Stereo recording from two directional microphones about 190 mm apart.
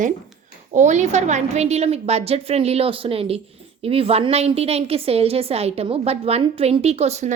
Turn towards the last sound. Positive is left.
turn(degrees=-35)  # may be behind; listen again after turning